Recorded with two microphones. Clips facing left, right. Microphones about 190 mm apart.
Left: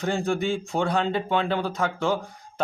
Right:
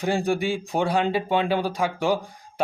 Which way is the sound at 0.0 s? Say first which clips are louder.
Right 2 dB; 15° right (ahead or behind).